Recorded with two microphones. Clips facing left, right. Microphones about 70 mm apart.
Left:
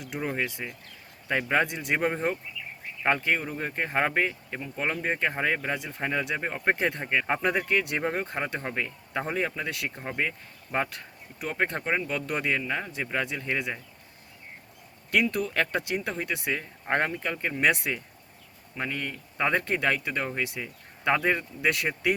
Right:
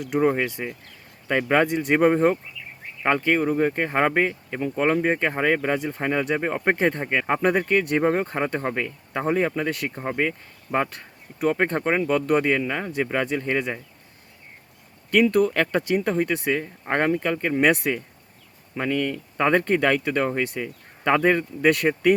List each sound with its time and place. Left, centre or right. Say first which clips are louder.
0.0 s speech: right 9 dB; right
15.1 s speech: right 7 dB; right
18.8 s speech: right 8 dB; right